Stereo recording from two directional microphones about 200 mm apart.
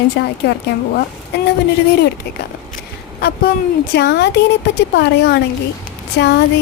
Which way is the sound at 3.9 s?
55° left (ahead or behind).